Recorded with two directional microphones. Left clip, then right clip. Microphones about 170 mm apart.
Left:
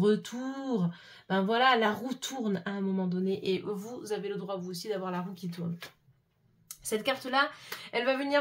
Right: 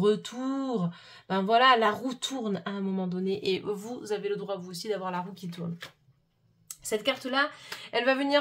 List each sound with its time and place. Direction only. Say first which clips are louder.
0.0 s speech: right 2 dB; 25° right (ahead or behind)
6.9 s a woman's voice: right 1 dB; 35° right (ahead or behind)